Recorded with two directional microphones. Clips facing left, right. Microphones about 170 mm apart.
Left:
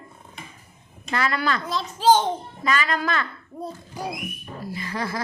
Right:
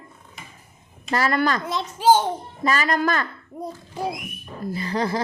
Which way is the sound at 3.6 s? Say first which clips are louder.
Right 3 dB; 25° right (ahead or behind).